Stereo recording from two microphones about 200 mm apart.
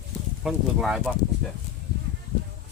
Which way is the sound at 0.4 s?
Centre (ahead or behind).